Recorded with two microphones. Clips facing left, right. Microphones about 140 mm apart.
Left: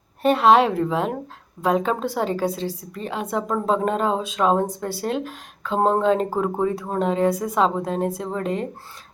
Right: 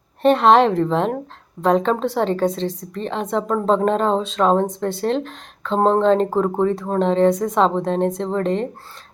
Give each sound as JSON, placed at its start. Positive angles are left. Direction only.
{"t": 0.2, "sound": "a woman's voice", "side_deg": 5}